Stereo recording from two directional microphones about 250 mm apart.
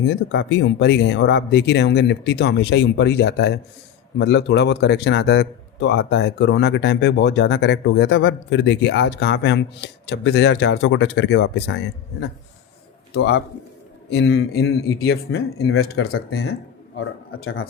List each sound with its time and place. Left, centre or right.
0.0 s speech: left
13.1 s a man's voice: left